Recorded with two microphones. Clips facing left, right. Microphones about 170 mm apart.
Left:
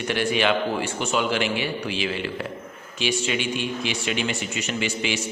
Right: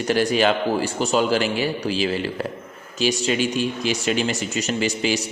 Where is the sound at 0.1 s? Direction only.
40° right (ahead or behind).